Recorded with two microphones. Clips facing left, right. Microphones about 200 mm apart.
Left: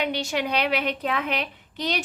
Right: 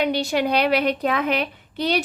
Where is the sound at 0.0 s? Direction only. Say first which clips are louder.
Right 5 dB; 35° right (ahead or behind).